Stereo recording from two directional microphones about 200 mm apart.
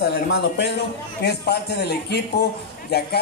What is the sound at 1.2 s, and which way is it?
A man's voice, 55° left (ahead or behind).